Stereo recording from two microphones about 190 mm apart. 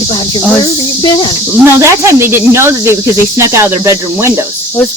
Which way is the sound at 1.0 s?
25° left (ahead or behind).